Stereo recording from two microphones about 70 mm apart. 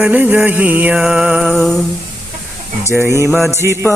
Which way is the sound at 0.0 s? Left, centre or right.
Right.